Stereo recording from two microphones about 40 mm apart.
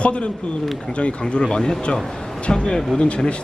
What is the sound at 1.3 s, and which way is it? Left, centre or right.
Speech, left.